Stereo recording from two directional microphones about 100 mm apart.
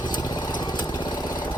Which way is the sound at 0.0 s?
45° left (ahead or behind).